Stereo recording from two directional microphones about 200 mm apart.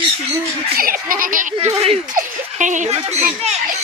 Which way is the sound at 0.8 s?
45° right (ahead or behind).